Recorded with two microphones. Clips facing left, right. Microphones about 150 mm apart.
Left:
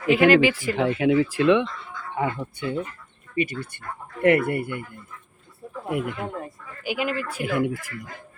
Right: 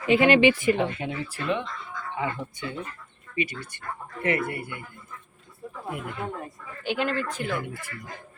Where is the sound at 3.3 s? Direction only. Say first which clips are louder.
Left 4 dB; 55° left (ahead or behind).